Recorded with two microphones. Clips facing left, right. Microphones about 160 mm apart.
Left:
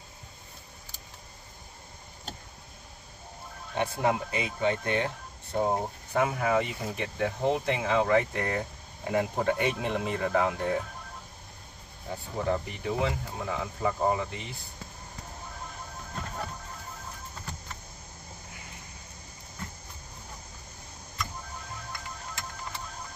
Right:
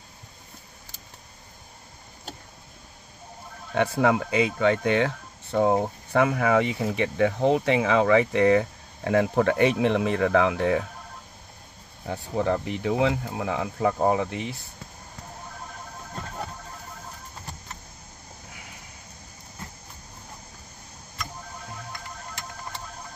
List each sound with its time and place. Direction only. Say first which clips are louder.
3.7 s speech: right 6 dB; 90° right
12.1 s speech: right 5 dB; 85° right